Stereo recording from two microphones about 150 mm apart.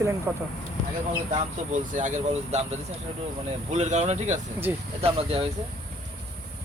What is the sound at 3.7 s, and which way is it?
Speech, 50° right (ahead or behind).